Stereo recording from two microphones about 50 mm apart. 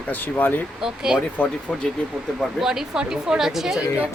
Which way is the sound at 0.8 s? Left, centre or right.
Centre.